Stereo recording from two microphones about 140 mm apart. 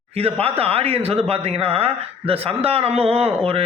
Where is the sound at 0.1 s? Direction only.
45° right (ahead or behind).